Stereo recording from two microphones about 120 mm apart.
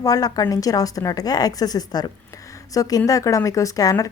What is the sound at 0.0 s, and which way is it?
Speech, 30° left (ahead or behind).